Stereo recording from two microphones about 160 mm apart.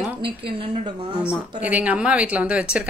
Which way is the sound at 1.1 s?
5° right (ahead or behind).